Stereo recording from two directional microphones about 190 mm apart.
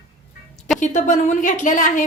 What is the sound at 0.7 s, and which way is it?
A woman's voice, 40° left (ahead or behind).